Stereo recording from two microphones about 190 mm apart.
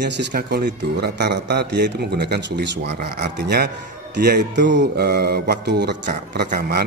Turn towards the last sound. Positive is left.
turn(degrees=-50)  # may be behind; listen again after turning